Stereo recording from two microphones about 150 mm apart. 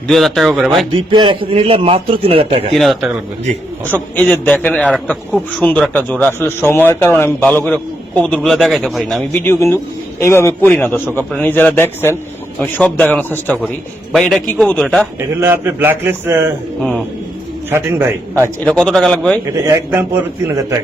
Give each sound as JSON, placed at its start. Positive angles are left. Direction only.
{"t": 0.1, "sound": "a man's voice", "side_deg": 0}
{"t": 1.1, "sound": "a man's voice", "side_deg": -35}
{"t": 2.7, "sound": "a man's voice", "side_deg": 0}
{"t": 4.1, "sound": "a man's voice", "side_deg": 10}
{"t": 9.3, "sound": "a man's voice", "side_deg": 15}
{"t": 14.1, "sound": "a man's voice", "side_deg": 0}
{"t": 15.2, "sound": "a man's voice", "side_deg": -15}
{"t": 18.4, "sound": "a man's voice", "side_deg": 10}
{"t": 19.6, "sound": "a man's voice", "side_deg": -20}